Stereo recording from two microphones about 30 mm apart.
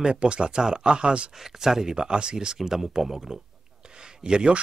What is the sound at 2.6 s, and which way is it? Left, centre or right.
Speech, centre.